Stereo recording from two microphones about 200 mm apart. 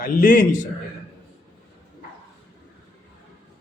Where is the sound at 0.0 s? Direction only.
40° left (ahead or behind).